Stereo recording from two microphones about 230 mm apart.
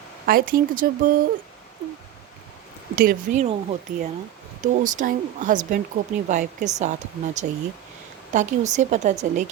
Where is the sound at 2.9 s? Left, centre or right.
Right.